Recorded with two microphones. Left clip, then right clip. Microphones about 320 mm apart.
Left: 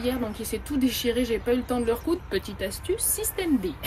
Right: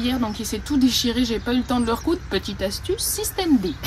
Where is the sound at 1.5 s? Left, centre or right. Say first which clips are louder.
Right 2 dB; centre.